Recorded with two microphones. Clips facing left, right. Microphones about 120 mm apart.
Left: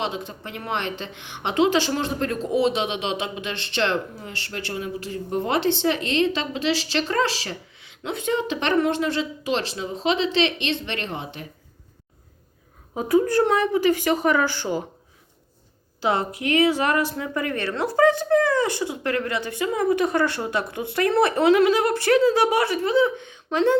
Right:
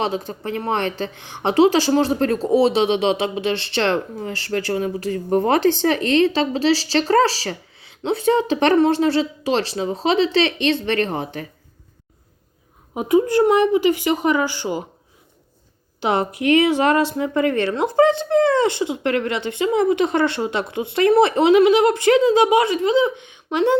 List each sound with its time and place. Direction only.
0.0 s speech: 40° right (ahead or behind)
12.9 s speech: 15° right (ahead or behind)
16.0 s a woman's voice: 25° right (ahead or behind)